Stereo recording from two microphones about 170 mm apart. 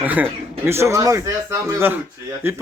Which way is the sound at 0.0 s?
10° right (ahead or behind).